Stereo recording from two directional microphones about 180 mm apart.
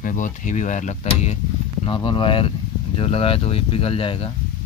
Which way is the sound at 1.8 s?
30° left (ahead or behind).